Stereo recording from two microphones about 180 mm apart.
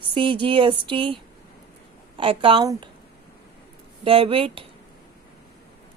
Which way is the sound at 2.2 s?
30° right (ahead or behind).